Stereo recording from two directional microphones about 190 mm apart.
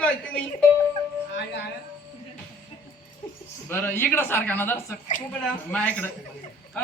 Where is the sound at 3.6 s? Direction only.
10° left (ahead or behind).